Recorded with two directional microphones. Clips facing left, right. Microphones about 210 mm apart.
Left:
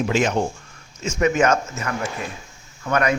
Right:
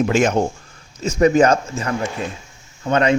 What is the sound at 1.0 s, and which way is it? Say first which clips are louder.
Speech: right 5 dB; 35° right (ahead or behind).